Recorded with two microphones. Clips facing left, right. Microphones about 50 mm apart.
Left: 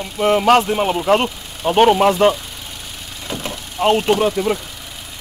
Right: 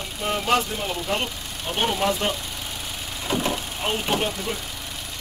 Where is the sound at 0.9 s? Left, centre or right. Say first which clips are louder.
Left 10 dB; left.